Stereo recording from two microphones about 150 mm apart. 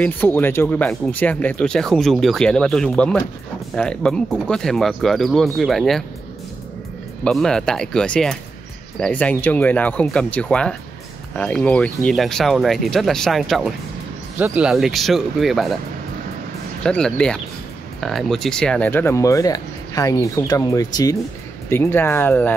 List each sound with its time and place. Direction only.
0.0 s speech: 10° left (ahead or behind)
7.2 s speech: 5° left (ahead or behind)
16.8 s speech: 5° left (ahead or behind)